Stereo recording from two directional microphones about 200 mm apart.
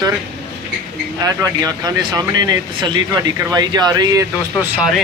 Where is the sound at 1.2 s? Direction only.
20° right (ahead or behind).